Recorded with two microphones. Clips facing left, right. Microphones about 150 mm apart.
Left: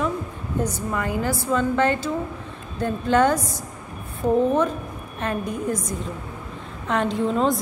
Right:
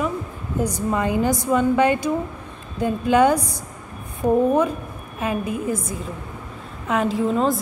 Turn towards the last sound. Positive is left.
turn(degrees=-5)  # may be behind; listen again after turning